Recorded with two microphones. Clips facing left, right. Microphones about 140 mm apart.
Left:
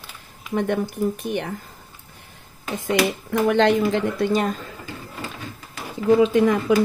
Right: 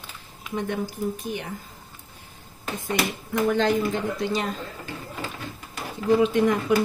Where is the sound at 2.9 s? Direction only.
85° left; by 4.5 s 50° left (ahead or behind).